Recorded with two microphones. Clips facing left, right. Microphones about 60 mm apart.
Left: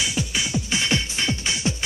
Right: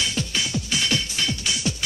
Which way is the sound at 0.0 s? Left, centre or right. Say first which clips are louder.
Left 1 dB; centre.